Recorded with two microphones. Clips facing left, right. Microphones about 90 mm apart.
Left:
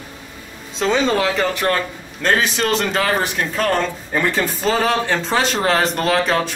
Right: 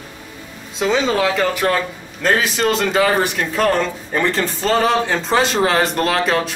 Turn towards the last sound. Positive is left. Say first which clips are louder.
# even
turn(degrees=0)  # may be behind; listen again after turning